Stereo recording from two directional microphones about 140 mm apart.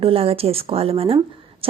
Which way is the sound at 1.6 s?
40° right (ahead or behind).